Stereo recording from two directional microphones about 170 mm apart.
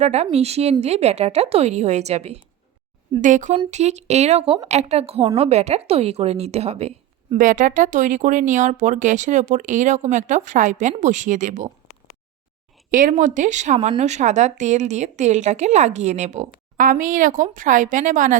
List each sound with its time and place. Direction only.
0.0 s a woman's voice: 40° right (ahead or behind)
7.3 s speech: 50° right (ahead or behind)
12.9 s speech: 50° right (ahead or behind)
16.7 s speech: 55° right (ahead or behind)